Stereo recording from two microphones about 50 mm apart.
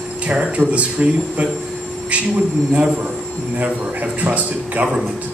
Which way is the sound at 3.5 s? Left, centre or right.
Right.